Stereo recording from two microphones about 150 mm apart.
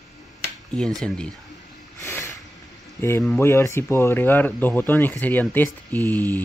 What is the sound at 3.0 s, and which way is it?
Speech, 15° left (ahead or behind).